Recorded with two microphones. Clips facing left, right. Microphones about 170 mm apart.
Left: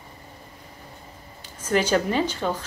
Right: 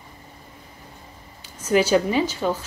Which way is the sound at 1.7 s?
10° right (ahead or behind).